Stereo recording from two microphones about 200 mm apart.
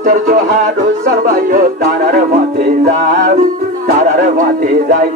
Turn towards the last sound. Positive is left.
turn(degrees=-45)  # may be behind; listen again after turning